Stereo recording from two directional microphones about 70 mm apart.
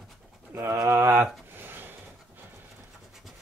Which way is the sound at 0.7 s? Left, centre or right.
Right.